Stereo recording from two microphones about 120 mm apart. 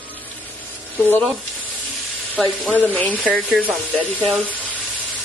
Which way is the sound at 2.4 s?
5° left (ahead or behind).